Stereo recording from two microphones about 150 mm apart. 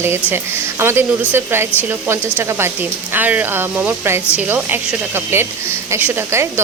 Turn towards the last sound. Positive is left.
turn(degrees=-15)  # may be behind; listen again after turning